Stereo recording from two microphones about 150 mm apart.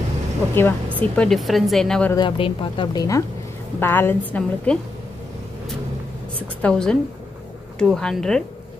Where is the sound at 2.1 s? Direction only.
35° left (ahead or behind); by 4.7 s 5° left (ahead or behind).